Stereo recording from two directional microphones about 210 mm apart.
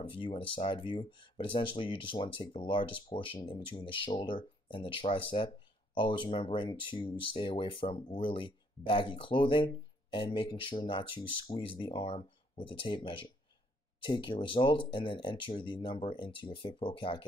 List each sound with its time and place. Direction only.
0.0 s speech: 25° left (ahead or behind)